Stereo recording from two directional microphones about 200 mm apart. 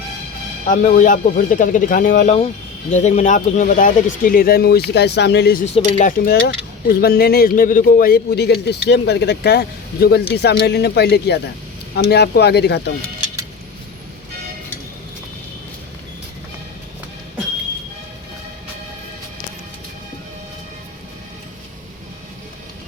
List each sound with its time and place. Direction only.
0.7 s a man's voice: 40° left (ahead or behind); by 5.5 s 55° left (ahead or behind)
5.6 s speech: 35° left (ahead or behind)
6.8 s a man's voice: 50° left (ahead or behind)